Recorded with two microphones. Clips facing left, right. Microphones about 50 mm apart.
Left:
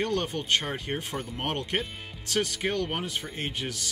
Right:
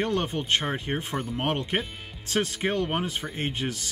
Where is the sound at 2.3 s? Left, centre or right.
Right.